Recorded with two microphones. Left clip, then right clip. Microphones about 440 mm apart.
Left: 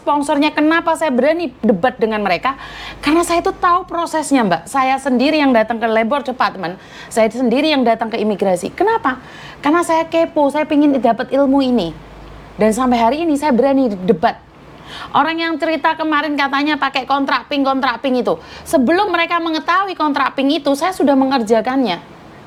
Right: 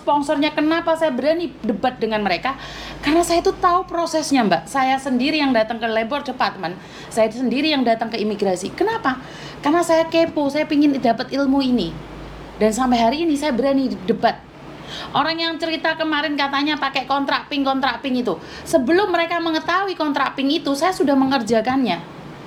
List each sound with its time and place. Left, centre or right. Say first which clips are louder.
0.0 s a woman's voice: left 3 dB; left